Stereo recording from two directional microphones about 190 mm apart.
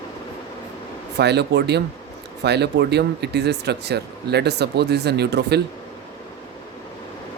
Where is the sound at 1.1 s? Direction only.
60° right (ahead or behind).